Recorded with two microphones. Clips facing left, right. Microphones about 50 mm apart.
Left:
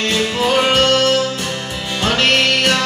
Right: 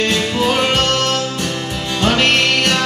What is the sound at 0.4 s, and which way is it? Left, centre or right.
Music, centre.